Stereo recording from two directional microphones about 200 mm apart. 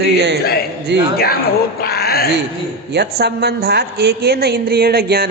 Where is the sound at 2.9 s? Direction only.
55° right (ahead or behind).